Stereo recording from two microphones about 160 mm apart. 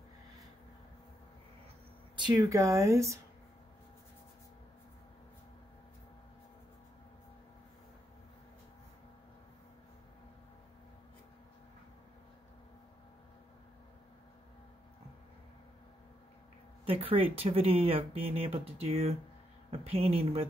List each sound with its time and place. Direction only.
2.1 s speech: 25° right (ahead or behind)
16.8 s speech: 35° right (ahead or behind)